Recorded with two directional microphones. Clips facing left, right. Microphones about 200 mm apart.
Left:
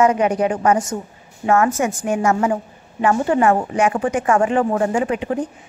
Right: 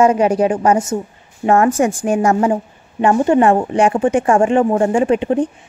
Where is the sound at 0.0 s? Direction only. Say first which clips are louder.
Right 3 dB; 30° right (ahead or behind).